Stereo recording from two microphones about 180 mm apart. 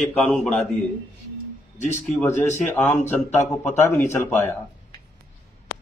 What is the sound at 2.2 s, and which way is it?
Speech, 40° left (ahead or behind).